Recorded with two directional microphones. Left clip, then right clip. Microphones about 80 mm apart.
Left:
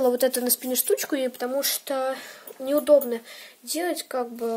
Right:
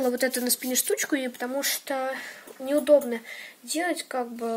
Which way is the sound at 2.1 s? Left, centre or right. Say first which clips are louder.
Right 1 dB; left.